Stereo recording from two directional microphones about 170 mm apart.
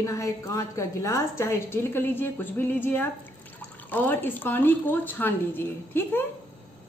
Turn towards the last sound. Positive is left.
turn(degrees=10)  # may be behind; listen again after turning